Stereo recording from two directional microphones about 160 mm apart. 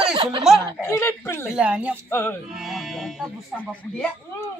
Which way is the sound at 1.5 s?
5° right (ahead or behind).